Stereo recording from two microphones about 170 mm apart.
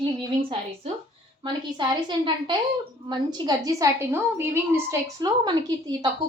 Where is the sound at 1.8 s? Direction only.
25° right (ahead or behind).